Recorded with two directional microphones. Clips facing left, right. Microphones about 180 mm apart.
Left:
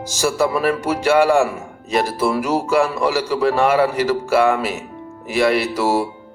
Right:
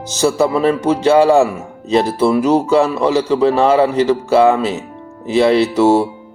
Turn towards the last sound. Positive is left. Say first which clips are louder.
# right 7 dB
turn(degrees=-25)  # may be behind; listen again after turning